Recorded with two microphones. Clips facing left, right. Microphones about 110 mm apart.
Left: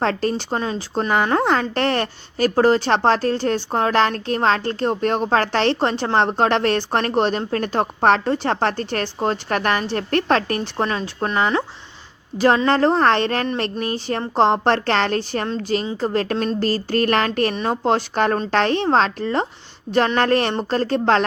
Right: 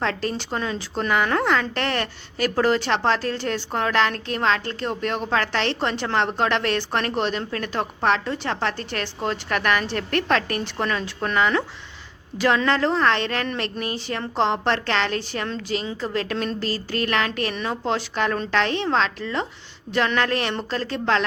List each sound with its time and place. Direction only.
0.0 s a woman's voice: 40° left (ahead or behind)